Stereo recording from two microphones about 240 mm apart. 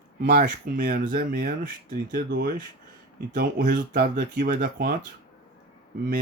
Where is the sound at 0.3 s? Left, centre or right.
Right.